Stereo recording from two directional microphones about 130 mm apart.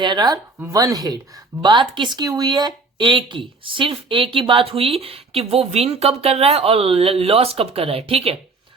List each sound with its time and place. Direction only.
0.0 s speech: 35° right (ahead or behind)